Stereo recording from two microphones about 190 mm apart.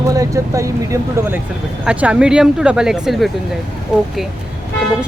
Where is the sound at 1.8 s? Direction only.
5° right (ahead or behind).